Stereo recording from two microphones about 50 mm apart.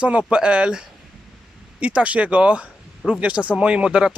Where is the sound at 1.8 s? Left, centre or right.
Right.